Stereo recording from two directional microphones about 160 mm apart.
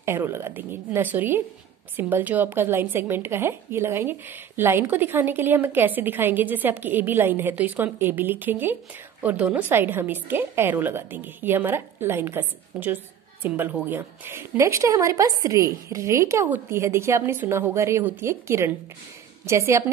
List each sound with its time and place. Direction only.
0.0 s speech: 15° right (ahead or behind)